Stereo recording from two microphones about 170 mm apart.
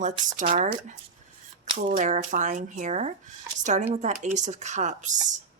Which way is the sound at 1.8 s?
50° right (ahead or behind).